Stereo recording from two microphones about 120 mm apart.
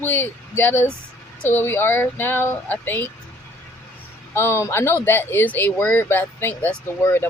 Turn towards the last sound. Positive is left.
turn(degrees=20)  # may be behind; listen again after turning